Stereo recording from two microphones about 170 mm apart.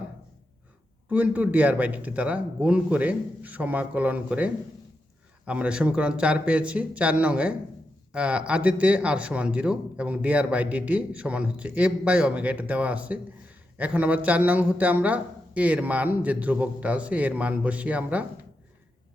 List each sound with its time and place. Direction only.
1.1 s speech: 10° right (ahead or behind)